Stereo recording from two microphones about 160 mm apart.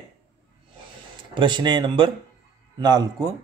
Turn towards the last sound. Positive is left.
turn(degrees=-25)  # may be behind; listen again after turning